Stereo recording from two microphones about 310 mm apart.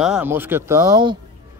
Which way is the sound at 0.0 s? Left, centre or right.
Centre.